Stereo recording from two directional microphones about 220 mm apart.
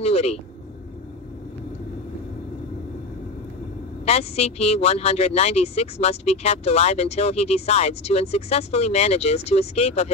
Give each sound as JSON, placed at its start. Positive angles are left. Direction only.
{"t": 0.0, "sound": "speech", "side_deg": 30}
{"t": 4.0, "sound": "speech", "side_deg": 30}